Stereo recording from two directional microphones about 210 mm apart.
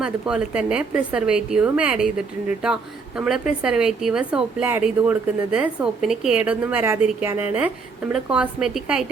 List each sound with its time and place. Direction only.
0.0 s a woman's voice: 5° right (ahead or behind)